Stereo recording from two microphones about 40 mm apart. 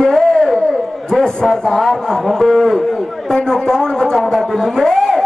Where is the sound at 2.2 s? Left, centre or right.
Centre.